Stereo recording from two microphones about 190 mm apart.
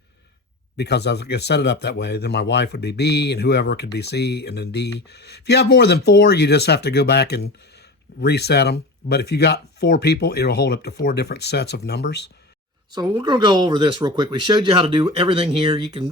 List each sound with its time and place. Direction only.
0.8 s speech: 60° left (ahead or behind)
12.9 s speech: 20° right (ahead or behind)